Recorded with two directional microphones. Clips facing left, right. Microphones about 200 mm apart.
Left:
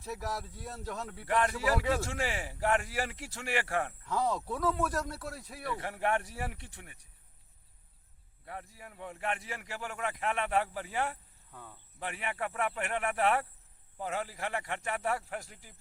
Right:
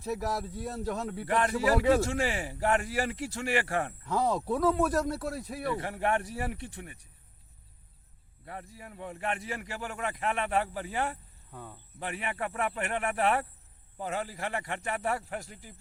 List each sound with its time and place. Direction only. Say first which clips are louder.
0.0 s speech: right 6 dB; 20° right (ahead or behind)
2.1 s speech: right 4 dB; 5° left (ahead or behind)
4.3 s speech: right 5 dB; 35° right (ahead or behind)
4.8 s speech: right 6 dB; 20° right (ahead or behind)
5.8 s speech: right 2 dB; 5° left (ahead or behind)
8.4 s a man's voice: right 2 dB; 5° left (ahead or behind)
11.5 s speech: right 5 dB; 35° right (ahead or behind)
11.9 s a man's voice: right 2 dB; 5° left (ahead or behind)